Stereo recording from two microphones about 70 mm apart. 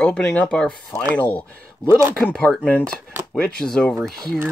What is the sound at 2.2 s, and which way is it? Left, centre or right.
Speech, centre.